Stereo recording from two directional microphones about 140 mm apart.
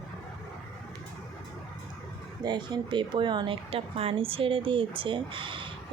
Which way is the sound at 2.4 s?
30° right (ahead or behind).